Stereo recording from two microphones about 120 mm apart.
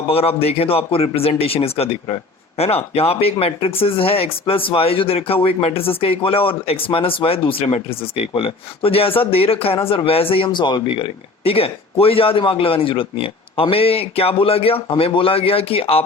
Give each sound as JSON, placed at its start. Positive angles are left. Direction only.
{"t": 0.1, "sound": "speech", "side_deg": 55}